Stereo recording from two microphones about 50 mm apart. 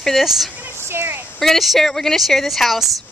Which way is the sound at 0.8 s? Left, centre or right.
Right.